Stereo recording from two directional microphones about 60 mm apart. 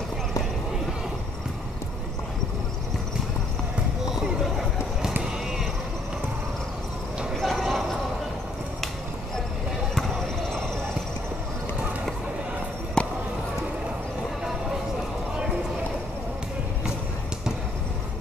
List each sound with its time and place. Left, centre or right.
7.3 s a sound: centre
9.9 s basketball bounce: centre
13.0 s basketball bounce: centre